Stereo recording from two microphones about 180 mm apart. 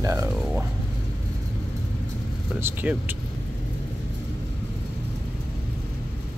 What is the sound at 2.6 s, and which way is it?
Speech, 10° right (ahead or behind).